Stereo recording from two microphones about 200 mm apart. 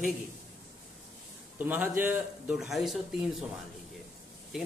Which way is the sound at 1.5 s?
10° right (ahead or behind).